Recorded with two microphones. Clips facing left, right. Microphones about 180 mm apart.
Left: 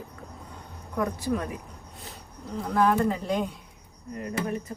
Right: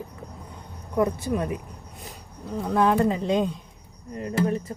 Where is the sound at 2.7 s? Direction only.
20° right (ahead or behind).